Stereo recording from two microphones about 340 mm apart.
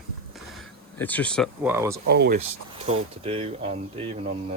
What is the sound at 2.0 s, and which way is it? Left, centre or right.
Speech, right.